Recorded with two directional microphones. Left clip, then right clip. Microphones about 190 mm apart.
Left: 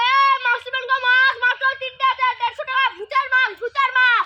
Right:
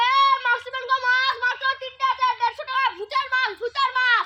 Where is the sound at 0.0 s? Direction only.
5° right (ahead or behind).